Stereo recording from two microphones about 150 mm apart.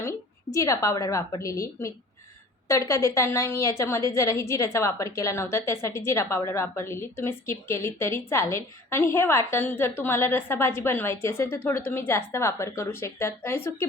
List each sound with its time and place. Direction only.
0.0 s a woman's voice: 20° left (ahead or behind)